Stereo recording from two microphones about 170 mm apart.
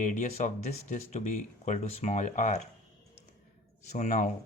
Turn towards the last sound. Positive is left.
turn(degrees=45)  # may be behind; listen again after turning